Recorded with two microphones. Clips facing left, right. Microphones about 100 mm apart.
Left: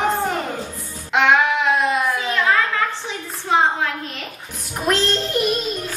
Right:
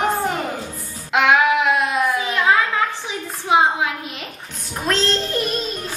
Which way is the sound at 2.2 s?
15° right (ahead or behind).